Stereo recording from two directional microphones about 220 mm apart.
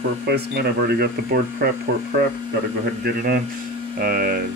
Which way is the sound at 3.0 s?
45° right (ahead or behind).